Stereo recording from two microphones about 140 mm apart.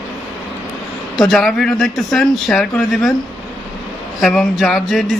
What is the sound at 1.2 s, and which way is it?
Speech, centre (ahead or behind).